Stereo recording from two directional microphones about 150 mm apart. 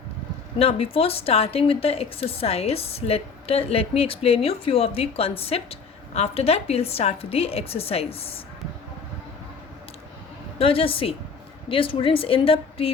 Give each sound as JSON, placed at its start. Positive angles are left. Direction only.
{"t": 0.6, "sound": "a woman's voice", "side_deg": 40}
{"t": 10.6, "sound": "a woman's voice", "side_deg": 40}